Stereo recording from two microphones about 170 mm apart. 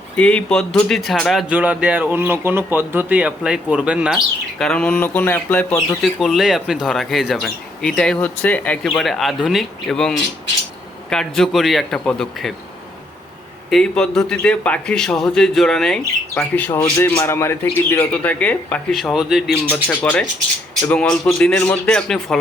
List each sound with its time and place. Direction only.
0.2 s speech: 5° left (ahead or behind)
6.0 s speech: centre (ahead or behind)
13.7 s speech: 5° left (ahead or behind)